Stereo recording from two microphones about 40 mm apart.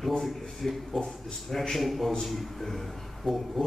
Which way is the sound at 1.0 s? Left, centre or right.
Centre.